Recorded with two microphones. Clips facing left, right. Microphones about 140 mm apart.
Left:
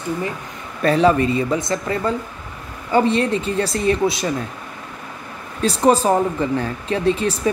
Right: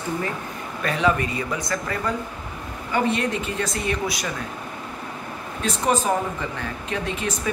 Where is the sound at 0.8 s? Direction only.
35° left (ahead or behind).